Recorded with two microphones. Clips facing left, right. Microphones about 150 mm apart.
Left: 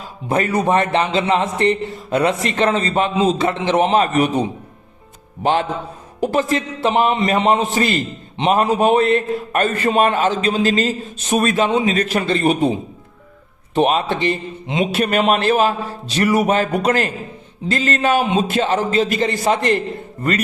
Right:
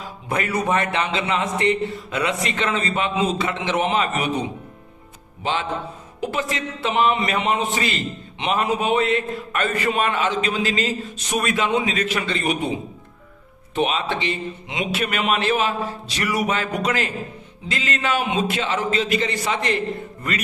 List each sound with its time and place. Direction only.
0.3 s a man's voice: 35° left (ahead or behind)
5.4 s a sound: 50° left (ahead or behind)
6.1 s a man's voice: 40° left (ahead or behind)
13.7 s a man's voice: 45° left (ahead or behind)
17.7 s a sound: 45° left (ahead or behind)
18.3 s a man's voice: 40° left (ahead or behind)